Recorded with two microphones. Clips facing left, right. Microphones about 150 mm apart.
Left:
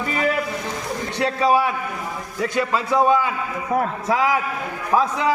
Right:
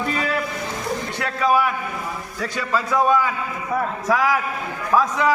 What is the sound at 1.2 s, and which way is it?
A man's voice, 30° left (ahead or behind).